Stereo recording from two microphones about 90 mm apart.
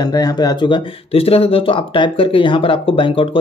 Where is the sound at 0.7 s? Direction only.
90° left.